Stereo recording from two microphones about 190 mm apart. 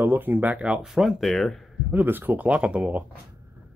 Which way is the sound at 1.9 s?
10° right (ahead or behind).